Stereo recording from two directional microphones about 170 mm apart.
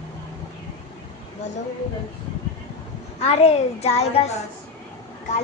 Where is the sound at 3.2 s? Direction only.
35° left (ahead or behind).